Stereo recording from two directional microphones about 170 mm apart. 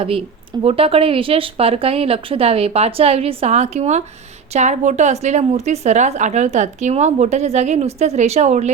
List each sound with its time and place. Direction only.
0.6 s a woman's voice: 35° right (ahead or behind)